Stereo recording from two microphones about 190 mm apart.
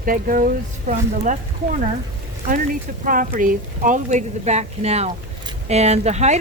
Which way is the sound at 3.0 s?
45° right (ahead or behind).